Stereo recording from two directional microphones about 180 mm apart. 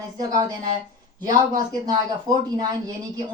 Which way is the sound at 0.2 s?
20° right (ahead or behind).